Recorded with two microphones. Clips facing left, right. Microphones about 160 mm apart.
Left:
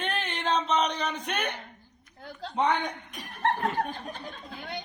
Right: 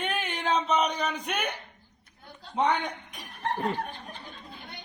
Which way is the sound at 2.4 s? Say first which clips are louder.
Left 7 dB; 90° left.